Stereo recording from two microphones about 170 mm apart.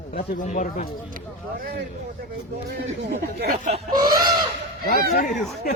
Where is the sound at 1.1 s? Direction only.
60° right (ahead or behind).